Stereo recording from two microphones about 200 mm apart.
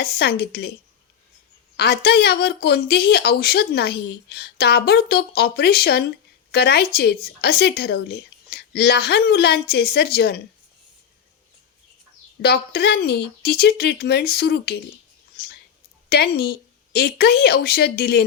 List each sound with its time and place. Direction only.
0.0 s speech: 50° left (ahead or behind)
1.7 s speech: 55° left (ahead or behind)
12.4 s speech: 55° left (ahead or behind)
16.0 s speech: 50° left (ahead or behind)